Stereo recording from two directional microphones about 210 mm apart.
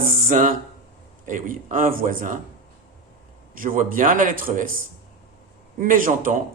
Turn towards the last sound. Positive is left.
turn(degrees=-40)  # may be behind; listen again after turning